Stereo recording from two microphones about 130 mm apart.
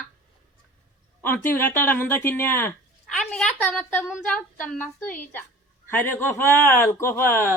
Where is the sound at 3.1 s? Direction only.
10° left (ahead or behind).